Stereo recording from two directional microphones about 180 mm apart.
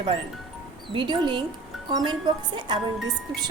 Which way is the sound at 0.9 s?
25° right (ahead or behind).